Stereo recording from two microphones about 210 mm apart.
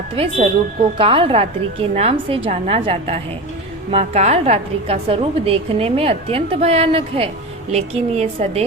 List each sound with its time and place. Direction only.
0.2 s a woman's voice: 25° right (ahead or behind)